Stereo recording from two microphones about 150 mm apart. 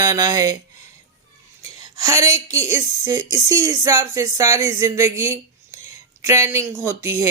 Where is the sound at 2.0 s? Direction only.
20° right (ahead or behind).